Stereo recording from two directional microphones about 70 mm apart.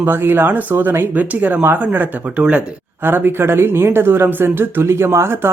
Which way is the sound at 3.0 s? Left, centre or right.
Right.